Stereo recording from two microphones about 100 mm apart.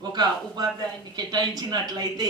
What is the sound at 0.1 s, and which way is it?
A man's voice, 45° right (ahead or behind).